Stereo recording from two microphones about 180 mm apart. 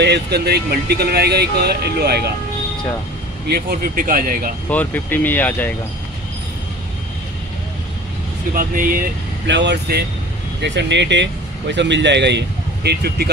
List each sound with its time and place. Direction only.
0.0 s speech: 65° right (ahead or behind)
3.4 s speech: 55° right (ahead or behind)
4.6 s speech: 10° left (ahead or behind)
8.5 s speech: 50° right (ahead or behind)
9.5 s speech: 75° right (ahead or behind)
10.6 s speech: 75° right (ahead or behind)